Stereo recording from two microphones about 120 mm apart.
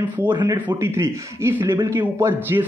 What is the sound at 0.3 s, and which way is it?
Speech, 40° right (ahead or behind).